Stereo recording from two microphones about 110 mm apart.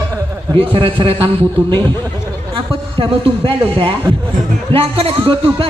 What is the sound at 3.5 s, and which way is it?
Speech, 50° right (ahead or behind).